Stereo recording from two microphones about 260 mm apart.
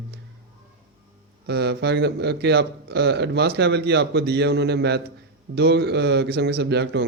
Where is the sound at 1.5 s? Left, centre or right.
Right.